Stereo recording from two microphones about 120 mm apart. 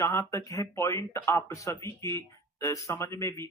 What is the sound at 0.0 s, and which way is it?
Speech, 25° left (ahead or behind).